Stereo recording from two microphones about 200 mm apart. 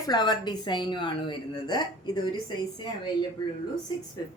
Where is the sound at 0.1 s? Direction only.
20° left (ahead or behind).